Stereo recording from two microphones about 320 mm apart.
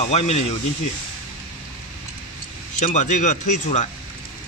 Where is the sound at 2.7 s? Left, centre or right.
Left.